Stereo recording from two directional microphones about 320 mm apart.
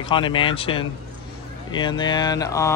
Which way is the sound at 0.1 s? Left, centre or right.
Centre.